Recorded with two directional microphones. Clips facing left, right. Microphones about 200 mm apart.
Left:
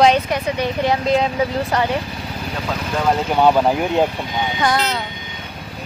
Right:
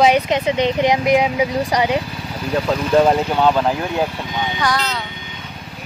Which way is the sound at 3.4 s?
15° left (ahead or behind).